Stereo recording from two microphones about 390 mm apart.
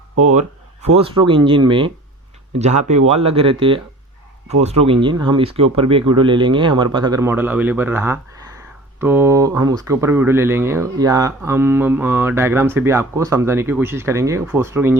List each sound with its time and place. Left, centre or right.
0.2 s speech: centre